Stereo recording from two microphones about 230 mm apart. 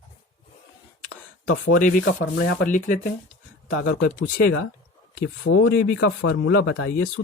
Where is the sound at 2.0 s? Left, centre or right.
Left.